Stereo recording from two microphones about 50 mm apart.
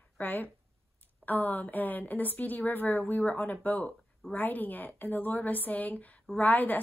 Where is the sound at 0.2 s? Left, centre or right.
Left.